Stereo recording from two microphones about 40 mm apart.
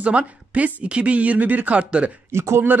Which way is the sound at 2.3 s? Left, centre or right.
Right.